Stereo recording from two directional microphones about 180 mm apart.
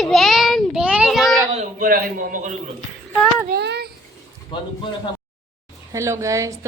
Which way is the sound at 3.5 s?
65° right (ahead or behind).